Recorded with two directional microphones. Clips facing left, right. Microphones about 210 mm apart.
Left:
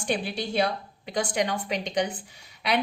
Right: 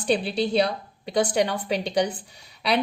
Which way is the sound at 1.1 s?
35° right (ahead or behind).